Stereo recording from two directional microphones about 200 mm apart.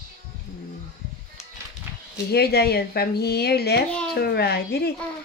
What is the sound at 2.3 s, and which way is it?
A child's voice, 55° left (ahead or behind).